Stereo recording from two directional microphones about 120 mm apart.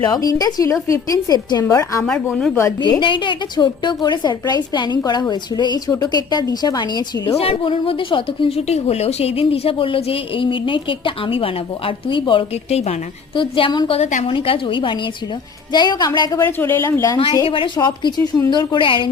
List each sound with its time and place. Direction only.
0.0 s a woman's voice: 30° left (ahead or behind)
3.0 s a woman's voice: 40° left (ahead or behind)
7.3 s speech: 50° left (ahead or behind)
14.0 s a woman's voice: 85° left
14.3 s a woman's voice: 50° left (ahead or behind)
16.5 s speech: 20° left (ahead or behind)
17.4 s a woman's voice: 45° left (ahead or behind)